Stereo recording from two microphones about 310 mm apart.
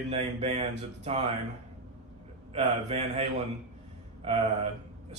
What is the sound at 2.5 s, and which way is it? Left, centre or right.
Speech, centre.